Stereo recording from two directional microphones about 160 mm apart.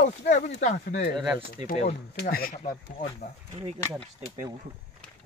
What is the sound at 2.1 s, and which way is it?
Speech, 70° left (ahead or behind).